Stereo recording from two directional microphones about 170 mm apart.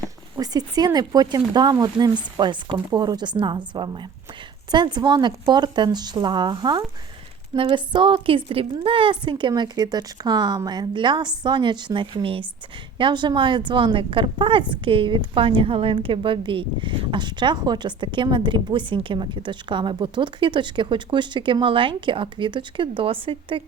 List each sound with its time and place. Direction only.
0.0 s speech: 20° right (ahead or behind)
4.7 s speech: 25° right (ahead or behind)